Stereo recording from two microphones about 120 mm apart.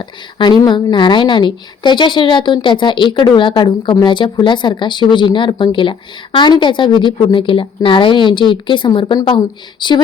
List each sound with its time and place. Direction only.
0.0 s a woman's voice: 40° left (ahead or behind)